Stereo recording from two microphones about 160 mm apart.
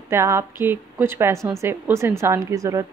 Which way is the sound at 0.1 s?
15° right (ahead or behind).